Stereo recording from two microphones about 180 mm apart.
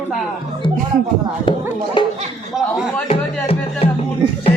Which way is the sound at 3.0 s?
30° left (ahead or behind).